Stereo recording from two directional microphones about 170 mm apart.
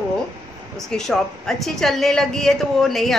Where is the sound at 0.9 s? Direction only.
5° left (ahead or behind).